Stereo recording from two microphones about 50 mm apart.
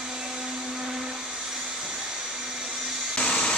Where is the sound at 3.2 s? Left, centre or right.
Centre.